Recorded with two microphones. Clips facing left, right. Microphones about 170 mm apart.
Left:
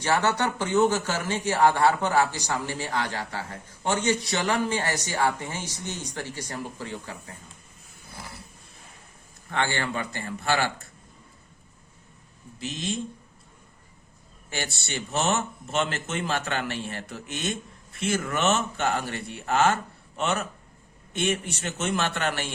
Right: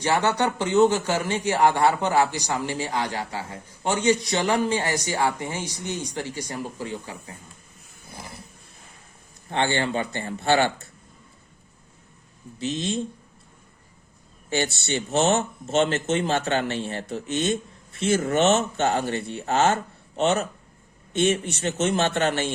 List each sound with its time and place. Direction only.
0.0 s a man's voice: 15° right (ahead or behind)
9.5 s a man's voice: 20° right (ahead or behind)
12.5 s a man's voice: 25° right (ahead or behind)
14.5 s a man's voice: 25° right (ahead or behind)